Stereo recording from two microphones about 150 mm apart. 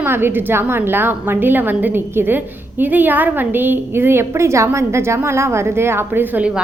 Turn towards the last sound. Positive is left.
turn(degrees=-10)  # may be behind; listen again after turning